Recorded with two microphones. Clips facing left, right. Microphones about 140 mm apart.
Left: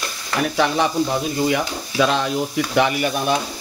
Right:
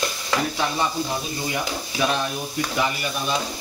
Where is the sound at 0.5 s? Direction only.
90° left.